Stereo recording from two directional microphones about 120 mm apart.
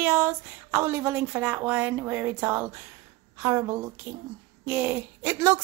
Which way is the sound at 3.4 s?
25° right (ahead or behind).